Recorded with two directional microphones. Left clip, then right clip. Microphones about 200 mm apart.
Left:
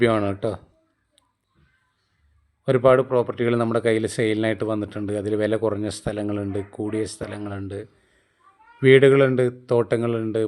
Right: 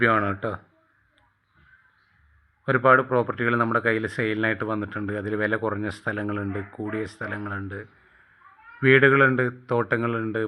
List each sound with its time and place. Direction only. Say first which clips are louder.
0.0 s speech: left 1 dB; 30° left (ahead or behind)
2.6 s speech: left 1 dB; 35° left (ahead or behind)